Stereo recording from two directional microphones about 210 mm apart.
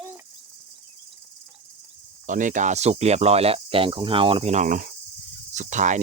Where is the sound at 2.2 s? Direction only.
35° right (ahead or behind).